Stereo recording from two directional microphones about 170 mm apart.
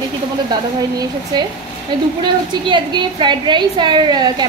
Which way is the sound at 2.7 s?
25° right (ahead or behind).